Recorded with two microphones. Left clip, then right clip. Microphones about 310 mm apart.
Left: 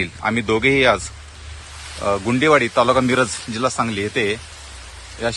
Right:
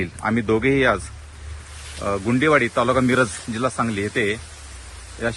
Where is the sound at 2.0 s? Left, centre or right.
Centre.